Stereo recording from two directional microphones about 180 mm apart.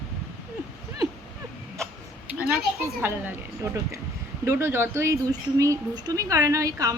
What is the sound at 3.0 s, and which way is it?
A woman's voice, 15° right (ahead or behind).